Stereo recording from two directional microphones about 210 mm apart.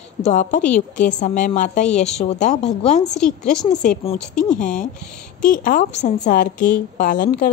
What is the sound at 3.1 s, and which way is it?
Speech, 5° left (ahead or behind).